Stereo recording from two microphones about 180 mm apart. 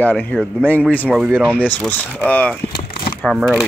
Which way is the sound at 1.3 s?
10° right (ahead or behind).